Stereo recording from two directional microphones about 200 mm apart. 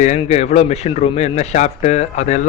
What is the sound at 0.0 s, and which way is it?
Speech, 35° left (ahead or behind).